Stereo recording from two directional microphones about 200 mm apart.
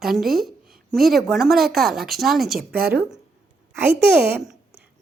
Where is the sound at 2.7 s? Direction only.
50° right (ahead or behind).